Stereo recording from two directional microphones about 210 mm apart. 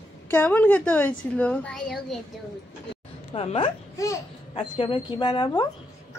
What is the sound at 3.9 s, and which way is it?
Speech, 15° left (ahead or behind).